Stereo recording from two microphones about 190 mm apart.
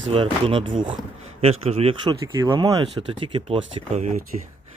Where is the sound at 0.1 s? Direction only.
30° right (ahead or behind).